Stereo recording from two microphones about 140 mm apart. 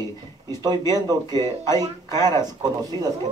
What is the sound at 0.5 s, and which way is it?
Speech, 30° right (ahead or behind).